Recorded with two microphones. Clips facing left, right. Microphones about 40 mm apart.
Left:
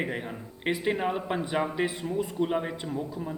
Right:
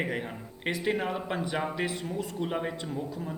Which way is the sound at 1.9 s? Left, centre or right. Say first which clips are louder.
Left 1 dB; left.